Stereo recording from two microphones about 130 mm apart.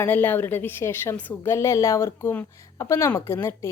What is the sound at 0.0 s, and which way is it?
A woman's voice, 15° left (ahead or behind).